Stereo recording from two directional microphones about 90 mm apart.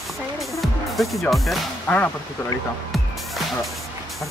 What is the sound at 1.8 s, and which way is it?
Speech, 15° left (ahead or behind).